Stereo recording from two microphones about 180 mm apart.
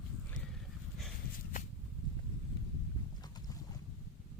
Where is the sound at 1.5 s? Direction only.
50° left (ahead or behind).